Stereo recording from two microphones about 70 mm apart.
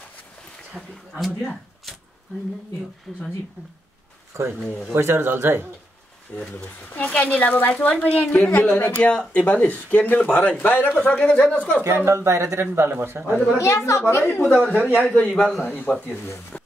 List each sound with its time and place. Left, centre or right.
0.8 s a man's voice: centre
3.1 s a man's voice: centre
4.3 s speech: right
6.5 s speech: left
11.8 s speech: right
13.6 s a woman's voice: left
14.7 s speech: left
15.1 s a man's voice: centre
15.6 s speech: left
16.5 s a sound: centre